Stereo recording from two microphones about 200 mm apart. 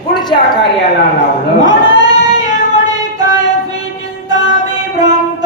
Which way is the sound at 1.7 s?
20° right (ahead or behind).